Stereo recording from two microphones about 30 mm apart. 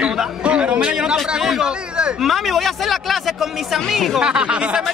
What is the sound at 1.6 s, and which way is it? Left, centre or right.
Speech, right.